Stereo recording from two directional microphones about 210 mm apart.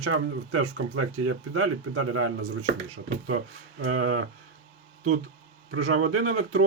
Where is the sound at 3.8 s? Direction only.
90° right.